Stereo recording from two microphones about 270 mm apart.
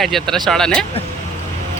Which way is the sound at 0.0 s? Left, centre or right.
Centre.